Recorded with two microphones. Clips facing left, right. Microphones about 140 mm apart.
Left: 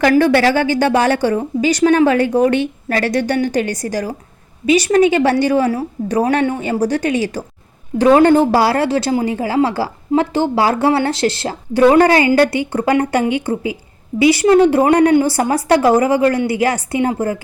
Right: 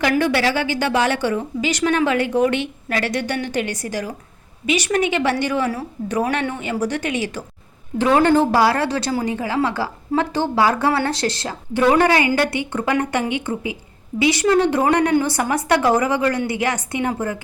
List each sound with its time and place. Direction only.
0.2 s a woman's voice: 45° left (ahead or behind); by 17.3 s 30° left (ahead or behind)